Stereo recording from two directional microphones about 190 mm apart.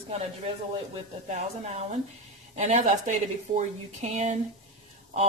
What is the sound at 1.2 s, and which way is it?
Speech, 35° right (ahead or behind).